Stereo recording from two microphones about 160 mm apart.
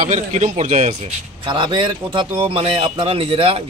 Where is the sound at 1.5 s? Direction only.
30° right (ahead or behind).